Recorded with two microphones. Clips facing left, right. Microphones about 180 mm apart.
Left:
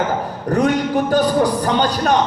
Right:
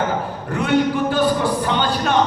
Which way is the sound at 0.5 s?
40° left (ahead or behind).